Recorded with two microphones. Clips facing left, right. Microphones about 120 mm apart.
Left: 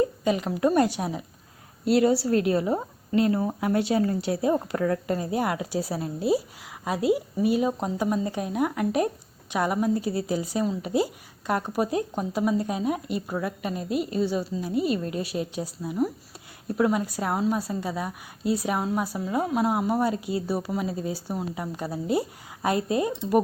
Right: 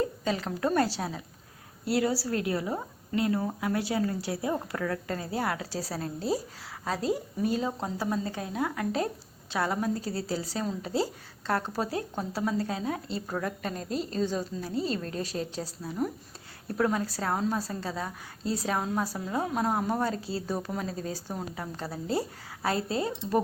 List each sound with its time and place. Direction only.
0.3 s a woman's voice: 15° left (ahead or behind)